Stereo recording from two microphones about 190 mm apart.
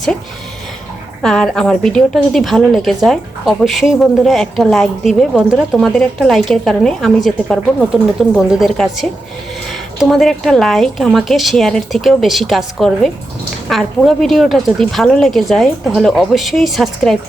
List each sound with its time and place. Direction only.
1.2 s a woman's voice: 5° left (ahead or behind)